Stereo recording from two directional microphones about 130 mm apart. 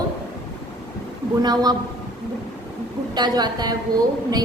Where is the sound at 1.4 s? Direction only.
30° right (ahead or behind).